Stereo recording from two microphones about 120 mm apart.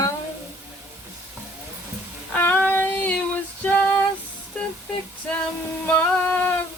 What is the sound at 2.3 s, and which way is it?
Female singing, 15° left (ahead or behind).